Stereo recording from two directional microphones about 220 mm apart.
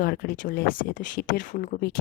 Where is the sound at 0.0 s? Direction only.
40° left (ahead or behind).